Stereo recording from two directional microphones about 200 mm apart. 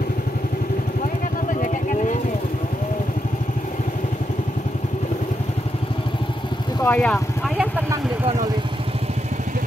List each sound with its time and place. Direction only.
6.8 s vehicle: 5° left (ahead or behind)